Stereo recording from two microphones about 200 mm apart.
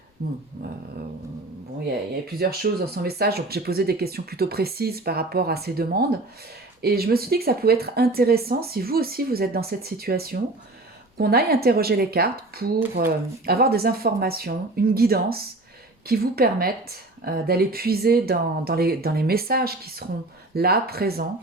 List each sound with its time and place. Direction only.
0.2 s a woman's voice: 50° right (ahead or behind)
2.2 s a woman's voice: 50° right (ahead or behind)